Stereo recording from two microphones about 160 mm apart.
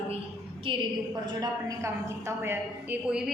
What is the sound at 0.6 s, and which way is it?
A woman's voice, 30° right (ahead or behind).